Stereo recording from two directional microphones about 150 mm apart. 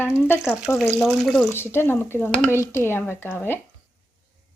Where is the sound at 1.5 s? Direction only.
15° left (ahead or behind).